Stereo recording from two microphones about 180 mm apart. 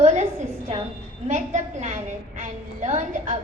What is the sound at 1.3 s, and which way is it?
A woman's voice, 40° right (ahead or behind).